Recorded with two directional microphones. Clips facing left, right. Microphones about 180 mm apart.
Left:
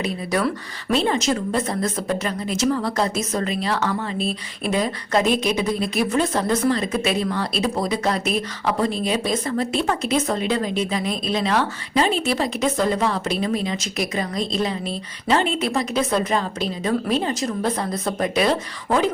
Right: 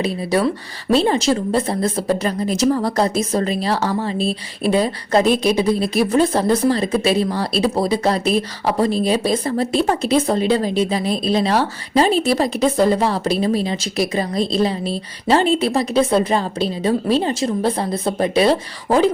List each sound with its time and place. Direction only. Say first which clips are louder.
0.0 s a woman's voice: right 4 dB; 30° right (ahead or behind)